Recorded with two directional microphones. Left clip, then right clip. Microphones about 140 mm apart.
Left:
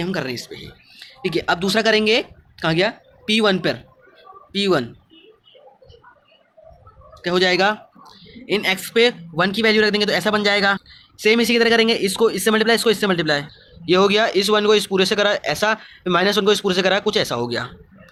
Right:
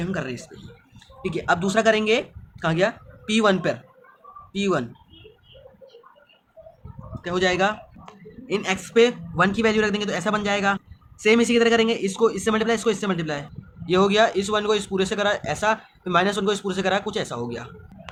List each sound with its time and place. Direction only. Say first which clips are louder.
0.0 s speech: left 5 dB; 40° left (ahead or behind)
7.1 s a man's voice: left 5 dB; 40° left (ahead or behind)